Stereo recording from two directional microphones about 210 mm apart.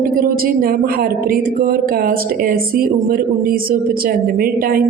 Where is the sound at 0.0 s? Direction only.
40° right (ahead or behind).